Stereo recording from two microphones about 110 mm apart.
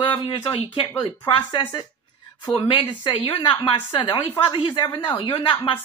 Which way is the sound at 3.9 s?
55° left (ahead or behind).